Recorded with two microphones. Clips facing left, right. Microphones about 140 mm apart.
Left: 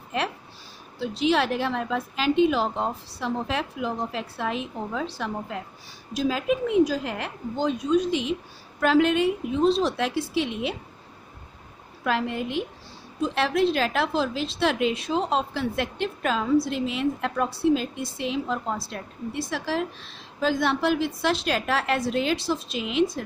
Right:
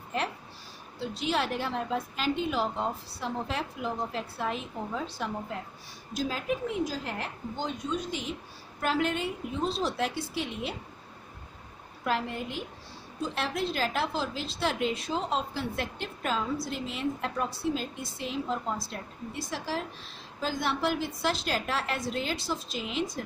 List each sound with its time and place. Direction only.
0.1 s a woman's voice: 90° left
12.0 s a woman's voice: 80° left